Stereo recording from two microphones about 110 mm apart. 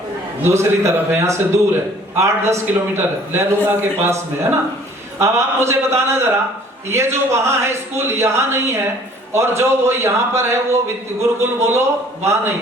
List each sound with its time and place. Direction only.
0.4 s a man's voice: 25° right (ahead or behind)
5.2 s a man's voice: 25° right (ahead or behind)